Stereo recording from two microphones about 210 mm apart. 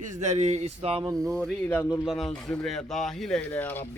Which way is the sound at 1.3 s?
5° left (ahead or behind).